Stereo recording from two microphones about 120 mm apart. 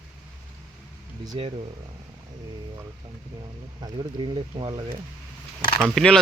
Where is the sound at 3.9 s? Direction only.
45° right (ahead or behind).